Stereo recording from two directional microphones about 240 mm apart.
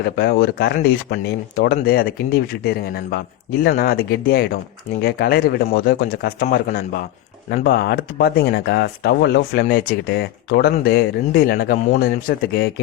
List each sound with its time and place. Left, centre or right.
0.0 s speech: left